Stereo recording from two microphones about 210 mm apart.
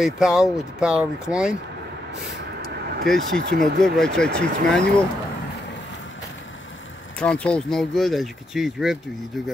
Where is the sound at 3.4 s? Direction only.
50° right (ahead or behind).